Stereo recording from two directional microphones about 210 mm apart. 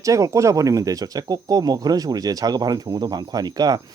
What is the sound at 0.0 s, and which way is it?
Speech, 15° right (ahead or behind).